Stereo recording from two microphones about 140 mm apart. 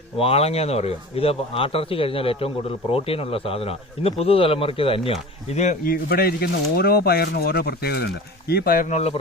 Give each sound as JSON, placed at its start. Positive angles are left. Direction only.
{"t": 0.2, "sound": "speech", "side_deg": 45}
{"t": 5.5, "sound": "speech", "side_deg": 55}
{"t": 5.8, "sound": "speech", "side_deg": 90}
{"t": 8.9, "sound": "speech", "side_deg": 50}